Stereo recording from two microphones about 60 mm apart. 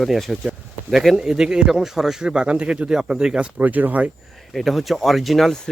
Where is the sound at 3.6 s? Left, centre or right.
Right.